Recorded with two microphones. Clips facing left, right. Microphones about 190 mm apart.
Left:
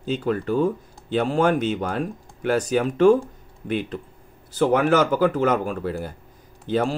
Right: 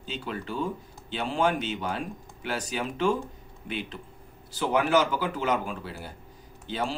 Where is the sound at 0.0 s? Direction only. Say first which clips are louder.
Left 11 dB; 45° left (ahead or behind).